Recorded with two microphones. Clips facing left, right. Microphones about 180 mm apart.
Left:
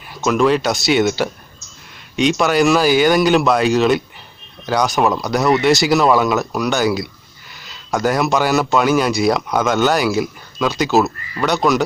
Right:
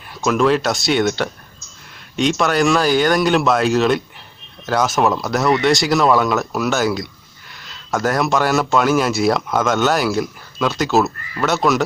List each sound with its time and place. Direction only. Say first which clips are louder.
0.1 s speech: left 1 dB; centre (ahead or behind)